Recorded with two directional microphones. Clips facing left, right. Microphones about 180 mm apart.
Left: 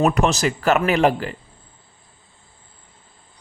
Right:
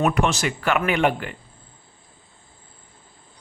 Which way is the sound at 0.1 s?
40° left (ahead or behind).